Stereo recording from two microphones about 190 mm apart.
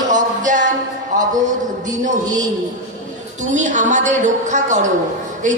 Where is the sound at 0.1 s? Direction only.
40° right (ahead or behind).